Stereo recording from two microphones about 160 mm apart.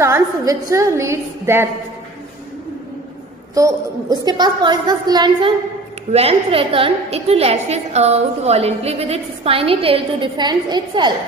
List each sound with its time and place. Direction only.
0.0 s a woman's voice: 20° right (ahead or behind)
3.5 s a woman's voice: 20° right (ahead or behind)